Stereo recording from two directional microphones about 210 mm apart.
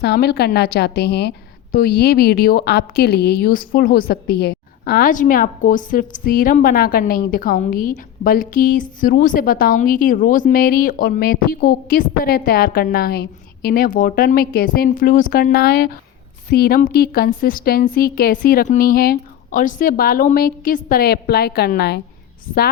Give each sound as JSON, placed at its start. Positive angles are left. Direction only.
{"t": 0.0, "sound": "a woman's voice", "side_deg": 50}